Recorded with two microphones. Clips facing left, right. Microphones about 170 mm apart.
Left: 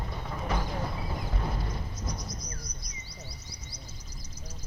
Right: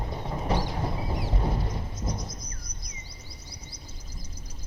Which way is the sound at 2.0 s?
25° right (ahead or behind).